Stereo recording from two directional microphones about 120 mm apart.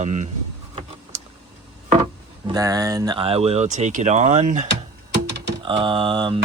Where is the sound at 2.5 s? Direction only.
30° right (ahead or behind).